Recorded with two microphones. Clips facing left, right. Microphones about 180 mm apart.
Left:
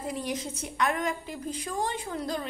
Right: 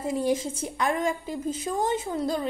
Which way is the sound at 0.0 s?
25° right (ahead or behind).